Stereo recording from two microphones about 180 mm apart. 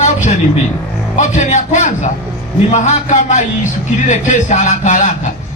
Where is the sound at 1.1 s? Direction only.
40° left (ahead or behind).